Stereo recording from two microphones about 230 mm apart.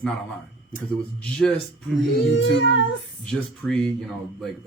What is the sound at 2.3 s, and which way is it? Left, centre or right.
Speech, left.